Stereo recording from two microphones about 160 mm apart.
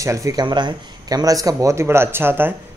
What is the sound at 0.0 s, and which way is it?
Speech, 20° right (ahead or behind).